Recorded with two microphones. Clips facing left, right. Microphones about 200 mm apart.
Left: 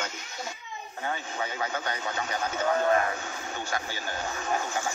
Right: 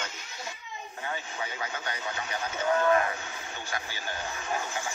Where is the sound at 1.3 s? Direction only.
45° left (ahead or behind).